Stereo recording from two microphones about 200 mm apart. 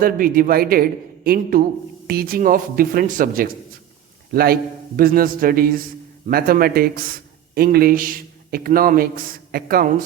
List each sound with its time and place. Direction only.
0.0 s a man's voice: 45° right (ahead or behind)